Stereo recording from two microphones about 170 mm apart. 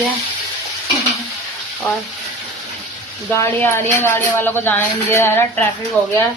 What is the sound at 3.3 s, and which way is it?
A woman's voice, 15° left (ahead or behind).